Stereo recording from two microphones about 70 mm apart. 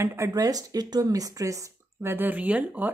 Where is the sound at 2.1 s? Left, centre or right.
Right.